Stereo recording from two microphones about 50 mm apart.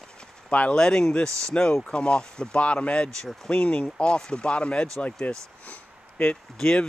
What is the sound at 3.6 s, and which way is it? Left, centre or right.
Speech, left.